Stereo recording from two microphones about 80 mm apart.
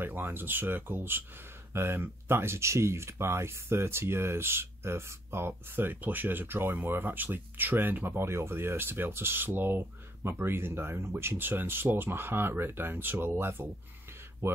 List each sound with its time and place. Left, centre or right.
0.0 s speech: right